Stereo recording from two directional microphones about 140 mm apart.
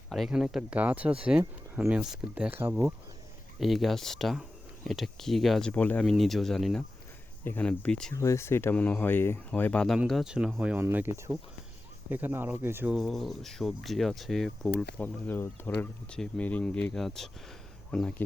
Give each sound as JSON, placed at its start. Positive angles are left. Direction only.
{"t": 0.1, "sound": "speech", "side_deg": -5}
{"t": 3.6, "sound": "speech", "side_deg": 0}
{"t": 8.1, "sound": "speech", "side_deg": 20}
{"t": 13.0, "sound": "speech", "side_deg": 0}